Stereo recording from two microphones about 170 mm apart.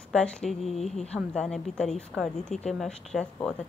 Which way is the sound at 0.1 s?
5° left (ahead or behind).